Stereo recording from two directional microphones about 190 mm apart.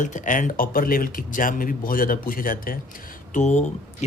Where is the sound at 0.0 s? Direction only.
40° left (ahead or behind).